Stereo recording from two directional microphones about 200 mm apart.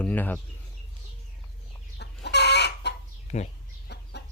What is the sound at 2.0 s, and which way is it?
Chicken, 55° left (ahead or behind).